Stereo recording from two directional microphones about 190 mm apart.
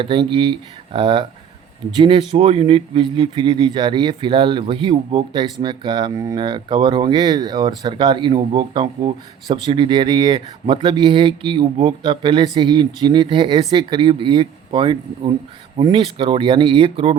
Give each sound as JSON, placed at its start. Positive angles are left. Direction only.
{"t": 0.0, "sound": "speech", "side_deg": -25}